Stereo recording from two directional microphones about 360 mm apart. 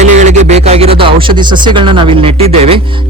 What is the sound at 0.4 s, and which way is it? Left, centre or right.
A man's voice, centre.